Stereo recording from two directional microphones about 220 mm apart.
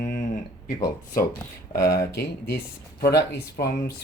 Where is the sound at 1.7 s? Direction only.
45° left (ahead or behind).